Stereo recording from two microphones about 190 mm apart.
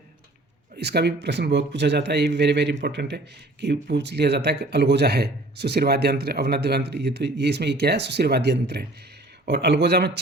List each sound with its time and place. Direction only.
0.8 s speech: 60° right (ahead or behind)